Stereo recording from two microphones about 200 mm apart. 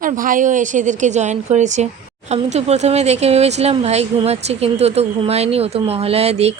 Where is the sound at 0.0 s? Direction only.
45° right (ahead or behind).